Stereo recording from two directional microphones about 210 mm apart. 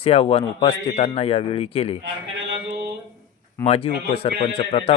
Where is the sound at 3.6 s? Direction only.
25° left (ahead or behind).